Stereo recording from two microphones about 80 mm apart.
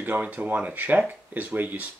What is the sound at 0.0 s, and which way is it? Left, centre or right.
Speech, right.